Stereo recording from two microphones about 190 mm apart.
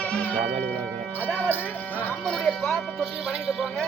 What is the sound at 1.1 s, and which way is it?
Music, 10° left (ahead or behind).